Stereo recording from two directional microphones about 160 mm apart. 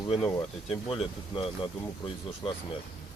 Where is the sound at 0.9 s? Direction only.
35° left (ahead or behind).